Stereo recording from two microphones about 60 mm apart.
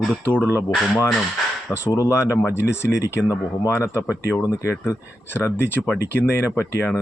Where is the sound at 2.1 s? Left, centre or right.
Left.